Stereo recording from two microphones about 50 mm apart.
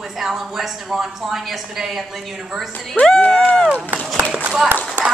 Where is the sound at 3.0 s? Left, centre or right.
Left.